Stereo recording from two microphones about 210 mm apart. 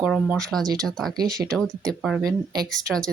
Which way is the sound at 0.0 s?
Centre (ahead or behind).